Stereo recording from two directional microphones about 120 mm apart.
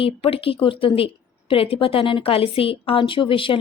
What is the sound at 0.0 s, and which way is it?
A woman's voice, 50° left (ahead or behind).